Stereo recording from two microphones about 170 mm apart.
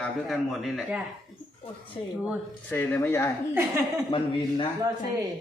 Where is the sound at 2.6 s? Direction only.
10° left (ahead or behind).